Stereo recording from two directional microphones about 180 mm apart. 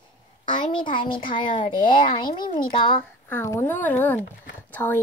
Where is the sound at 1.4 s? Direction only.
45° left (ahead or behind).